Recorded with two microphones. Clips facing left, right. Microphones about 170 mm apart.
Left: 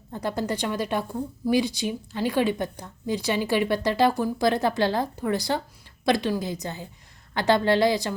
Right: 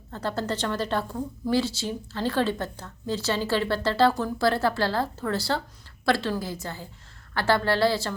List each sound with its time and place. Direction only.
0.1 s a woman's voice: 15° left (ahead or behind)